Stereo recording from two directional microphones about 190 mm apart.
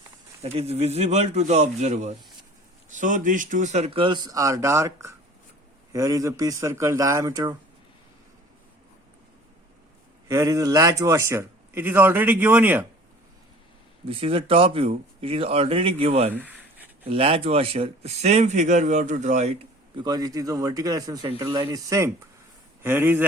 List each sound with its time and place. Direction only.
0.4 s a man's voice: 35° right (ahead or behind)
10.2 s a man's voice: 15° right (ahead or behind)
14.1 s a man's voice: 30° right (ahead or behind)
16.3 s a sound: 10° right (ahead or behind)
17.1 s a man's voice: 30° right (ahead or behind)
20.0 s a man's voice: 20° right (ahead or behind)
21.6 s a man's voice: 15° right (ahead or behind)